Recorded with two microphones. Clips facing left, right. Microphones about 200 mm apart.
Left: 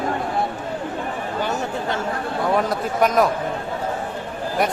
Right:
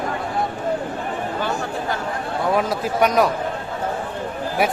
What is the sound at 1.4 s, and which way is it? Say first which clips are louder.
Speech: even; 20° left (ahead or behind).